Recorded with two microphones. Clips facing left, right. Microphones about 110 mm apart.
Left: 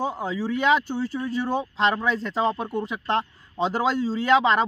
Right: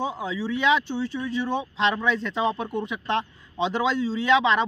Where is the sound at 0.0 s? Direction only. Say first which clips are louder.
Left 1 dB; 45° left (ahead or behind).